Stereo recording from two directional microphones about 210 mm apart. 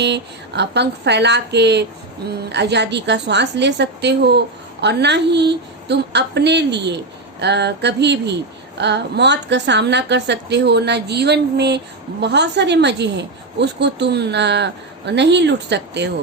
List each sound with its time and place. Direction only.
0.0 s a woman's voice: 55° right (ahead or behind)